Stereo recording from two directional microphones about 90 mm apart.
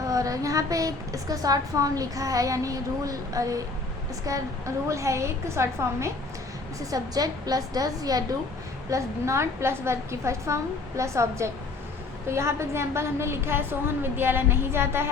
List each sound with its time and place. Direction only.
0.0 s a woman's voice: 40° right (ahead or behind)
6.7 s a woman's voice: 45° right (ahead or behind); by 15.1 s 25° right (ahead or behind)